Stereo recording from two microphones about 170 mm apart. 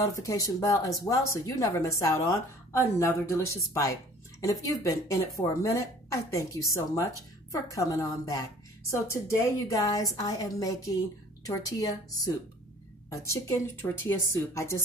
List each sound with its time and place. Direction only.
0.0 s speech: 20° left (ahead or behind)